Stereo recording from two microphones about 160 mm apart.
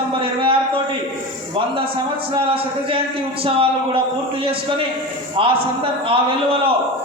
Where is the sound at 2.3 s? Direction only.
35° right (ahead or behind).